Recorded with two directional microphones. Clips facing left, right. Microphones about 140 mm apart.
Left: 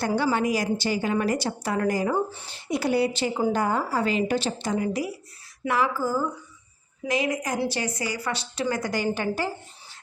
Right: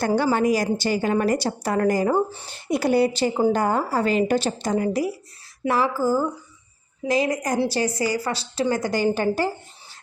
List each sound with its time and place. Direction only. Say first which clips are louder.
0.0 s a woman's voice: right 4 dB; 45° right (ahead or behind)
5.6 s a sound: right 4 dB; 35° right (ahead or behind)
7.1 s a woman's voice: right 4 dB; 40° right (ahead or behind)